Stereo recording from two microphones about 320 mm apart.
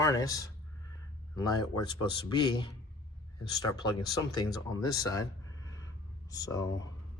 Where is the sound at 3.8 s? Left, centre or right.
Centre.